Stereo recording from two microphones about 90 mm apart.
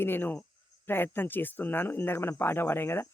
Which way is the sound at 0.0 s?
25° left (ahead or behind).